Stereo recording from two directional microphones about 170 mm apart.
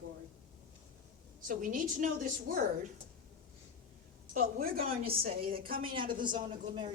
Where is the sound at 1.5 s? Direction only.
50° right (ahead or behind).